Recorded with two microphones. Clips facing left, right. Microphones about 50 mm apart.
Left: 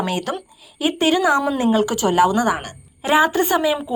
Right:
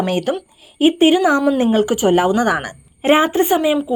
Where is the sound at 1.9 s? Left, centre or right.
Right.